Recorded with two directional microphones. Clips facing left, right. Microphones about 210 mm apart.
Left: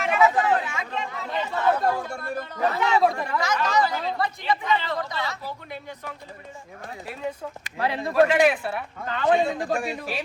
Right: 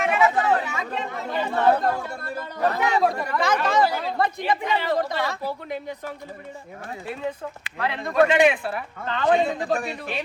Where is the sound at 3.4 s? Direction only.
55° right (ahead or behind).